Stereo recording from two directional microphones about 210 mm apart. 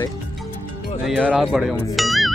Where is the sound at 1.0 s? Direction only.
5° right (ahead or behind).